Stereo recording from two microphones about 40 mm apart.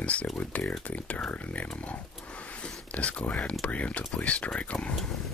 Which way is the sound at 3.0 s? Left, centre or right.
Left.